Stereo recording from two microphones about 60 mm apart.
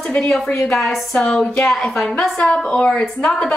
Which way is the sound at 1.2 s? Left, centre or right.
Centre.